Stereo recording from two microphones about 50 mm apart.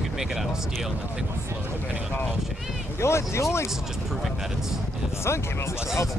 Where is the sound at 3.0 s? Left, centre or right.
Left.